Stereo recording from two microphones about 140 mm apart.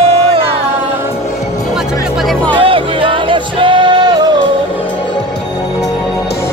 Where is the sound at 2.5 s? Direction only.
40° right (ahead or behind).